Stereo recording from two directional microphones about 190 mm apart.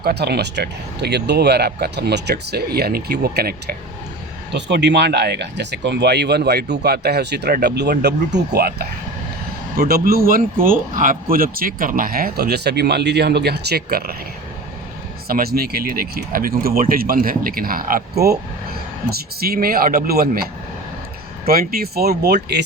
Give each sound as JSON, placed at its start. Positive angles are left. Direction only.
{"t": 0.0, "sound": "speech", "side_deg": -60}
{"t": 4.5, "sound": "speech", "side_deg": -65}
{"t": 15.3, "sound": "speech", "side_deg": -55}
{"t": 19.4, "sound": "speech", "side_deg": -50}